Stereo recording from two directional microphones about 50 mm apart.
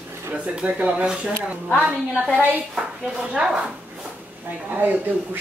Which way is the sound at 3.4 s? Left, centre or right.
Centre.